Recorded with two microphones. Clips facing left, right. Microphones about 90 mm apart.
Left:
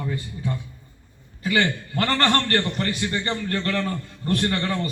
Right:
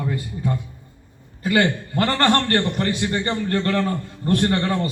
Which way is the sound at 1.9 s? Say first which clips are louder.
Right 2 dB; 20° right (ahead or behind).